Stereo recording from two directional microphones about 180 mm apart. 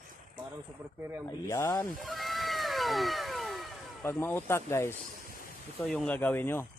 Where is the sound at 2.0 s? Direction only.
Centre (ahead or behind).